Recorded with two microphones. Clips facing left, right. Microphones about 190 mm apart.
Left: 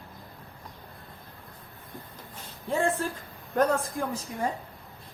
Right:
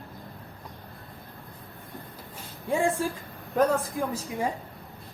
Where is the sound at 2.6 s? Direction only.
15° right (ahead or behind).